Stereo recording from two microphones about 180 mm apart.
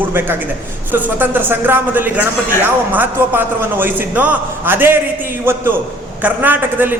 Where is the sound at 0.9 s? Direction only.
10° right (ahead or behind).